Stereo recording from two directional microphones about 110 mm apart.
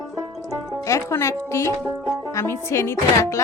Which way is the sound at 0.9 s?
25° left (ahead or behind).